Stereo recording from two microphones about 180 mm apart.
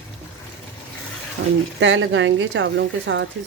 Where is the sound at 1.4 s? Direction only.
75° right (ahead or behind).